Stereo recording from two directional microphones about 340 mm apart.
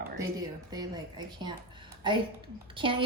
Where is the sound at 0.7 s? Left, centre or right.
Centre.